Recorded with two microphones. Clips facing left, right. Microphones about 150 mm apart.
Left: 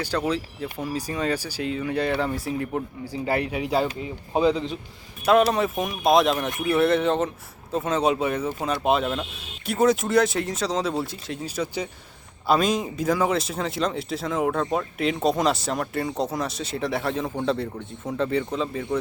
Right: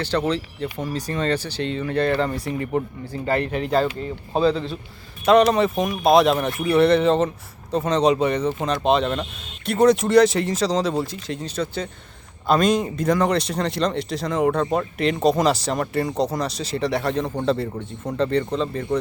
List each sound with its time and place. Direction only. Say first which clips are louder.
0.0 s speech: right 3 dB; 10° left (ahead or behind)
5.2 s speech: right 3 dB; 5° left (ahead or behind)